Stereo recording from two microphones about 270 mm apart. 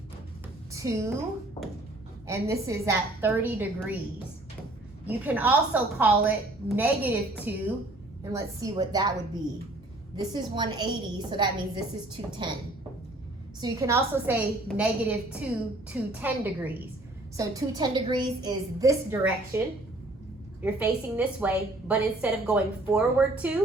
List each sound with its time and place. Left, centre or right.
0.7 s a woman's voice: centre
2.2 s a woman's voice: centre
5.0 s a woman's voice: centre
10.2 s a woman's voice: centre
13.6 s a woman's voice: centre